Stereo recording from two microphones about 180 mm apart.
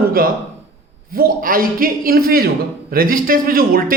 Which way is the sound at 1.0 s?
55° right (ahead or behind).